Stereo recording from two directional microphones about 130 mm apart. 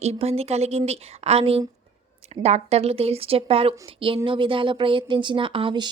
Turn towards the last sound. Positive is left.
turn(degrees=-40)  # may be behind; listen again after turning